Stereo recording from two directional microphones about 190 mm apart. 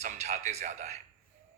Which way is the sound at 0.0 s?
35° right (ahead or behind).